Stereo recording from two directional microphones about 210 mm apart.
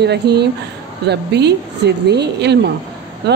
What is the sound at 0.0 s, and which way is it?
Speech, 50° right (ahead or behind).